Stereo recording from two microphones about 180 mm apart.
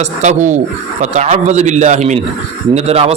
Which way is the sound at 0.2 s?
40° right (ahead or behind).